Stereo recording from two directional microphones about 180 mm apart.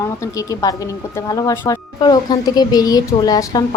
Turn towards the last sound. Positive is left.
turn(degrees=20)  # may be behind; listen again after turning